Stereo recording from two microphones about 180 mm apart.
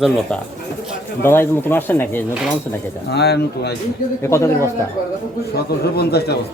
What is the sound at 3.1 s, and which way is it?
Speech, 65° left (ahead or behind).